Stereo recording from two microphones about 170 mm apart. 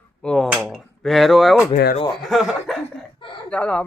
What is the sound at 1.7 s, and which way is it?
Speech, 60° left (ahead or behind).